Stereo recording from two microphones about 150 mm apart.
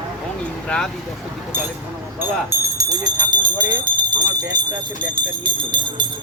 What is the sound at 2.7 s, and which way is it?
Speech, 25° right (ahead or behind).